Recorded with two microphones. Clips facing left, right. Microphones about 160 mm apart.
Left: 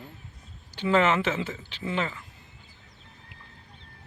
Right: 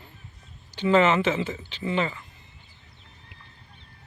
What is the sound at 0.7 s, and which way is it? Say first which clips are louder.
Speech: right 3 dB; centre (ahead or behind).